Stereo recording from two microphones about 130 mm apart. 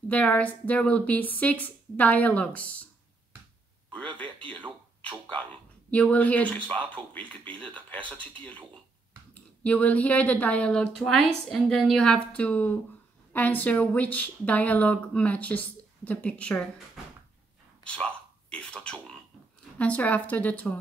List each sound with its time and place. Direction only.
0.1 s speech: 10° left (ahead or behind)
4.0 s a man's voice: 40° right (ahead or behind)
5.9 s speech: 10° left (ahead or behind)
6.8 s a man's voice: 35° right (ahead or behind)
9.3 s a woman's voice: 10° left (ahead or behind)
17.8 s a sound: 5° left (ahead or behind)
19.8 s speech: 10° left (ahead or behind)